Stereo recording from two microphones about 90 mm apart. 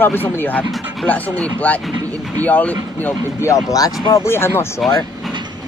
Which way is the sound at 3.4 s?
35° left (ahead or behind).